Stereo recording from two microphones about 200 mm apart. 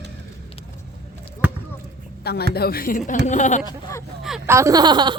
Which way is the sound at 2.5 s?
50° left (ahead or behind).